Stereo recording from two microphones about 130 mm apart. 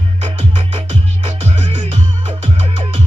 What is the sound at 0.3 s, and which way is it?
Music, 45° right (ahead or behind).